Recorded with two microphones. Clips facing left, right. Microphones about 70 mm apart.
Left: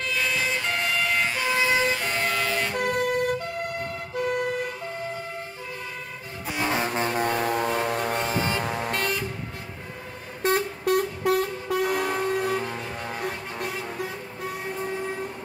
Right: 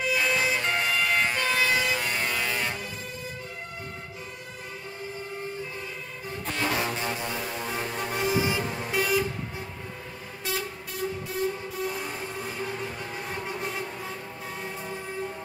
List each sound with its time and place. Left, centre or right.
0.0 s emergency vehicle: centre
1.4 s vehicle: centre
1.7 s vehicle: centre
2.2 s vehicle: centre
2.7 s emergency vehicle: left
6.4 s music: centre
6.9 s music: left
8.6 s vehicle: left
8.9 s vehicle: centre
10.4 s train: left
13.2 s vehicle: left